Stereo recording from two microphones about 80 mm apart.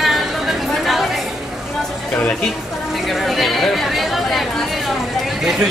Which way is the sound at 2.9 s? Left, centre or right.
Centre.